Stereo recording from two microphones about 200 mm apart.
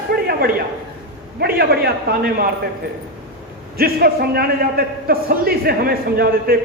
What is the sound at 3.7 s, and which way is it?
A man's voice, 50° right (ahead or behind).